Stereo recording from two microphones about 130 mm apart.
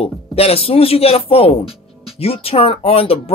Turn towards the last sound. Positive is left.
turn(degrees=50)  # may be behind; listen again after turning